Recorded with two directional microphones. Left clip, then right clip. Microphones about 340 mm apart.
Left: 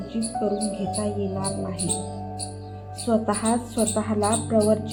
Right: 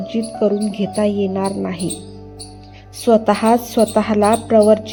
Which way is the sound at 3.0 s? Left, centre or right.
Right.